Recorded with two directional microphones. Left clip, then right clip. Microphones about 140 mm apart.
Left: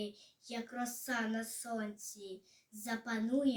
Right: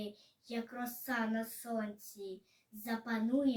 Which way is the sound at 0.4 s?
20° left (ahead or behind).